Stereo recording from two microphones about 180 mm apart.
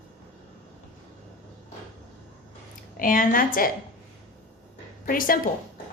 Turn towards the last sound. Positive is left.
turn(degrees=50)  # may be behind; listen again after turning